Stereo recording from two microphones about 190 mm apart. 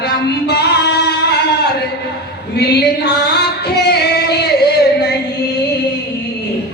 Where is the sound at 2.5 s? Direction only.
60° left (ahead or behind).